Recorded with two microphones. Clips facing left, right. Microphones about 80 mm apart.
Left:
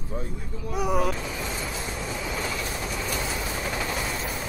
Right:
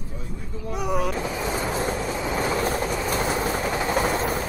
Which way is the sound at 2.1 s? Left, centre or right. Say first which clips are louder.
Right 6 dB; right.